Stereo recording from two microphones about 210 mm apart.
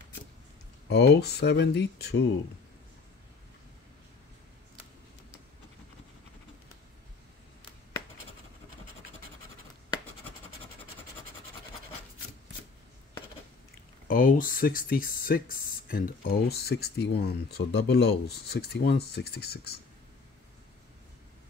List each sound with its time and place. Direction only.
0.8 s speech: 55° left (ahead or behind)
14.0 s speech: 45° left (ahead or behind)